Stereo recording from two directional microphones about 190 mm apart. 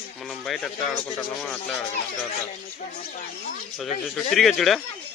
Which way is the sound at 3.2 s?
45° left (ahead or behind).